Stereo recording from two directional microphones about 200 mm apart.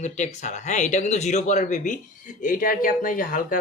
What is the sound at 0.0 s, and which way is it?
Speech, 35° left (ahead or behind).